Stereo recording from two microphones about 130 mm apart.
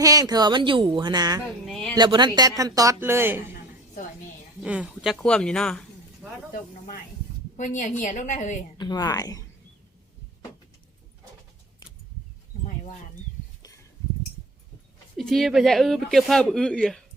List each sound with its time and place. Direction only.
0.0 s speech: 25° right (ahead or behind)
1.6 s speech: 5° left (ahead or behind)
2.0 s speech: 35° right (ahead or behind); by 3.4 s 20° right (ahead or behind)
4.6 s speech: 10° right (ahead or behind)
5.1 s speech: 5° left (ahead or behind)
6.5 s speech: 90° left
7.5 s a woman's voice: 75° left (ahead or behind)
8.8 s speech: 30° left (ahead or behind)
15.2 s speech: 5° left (ahead or behind)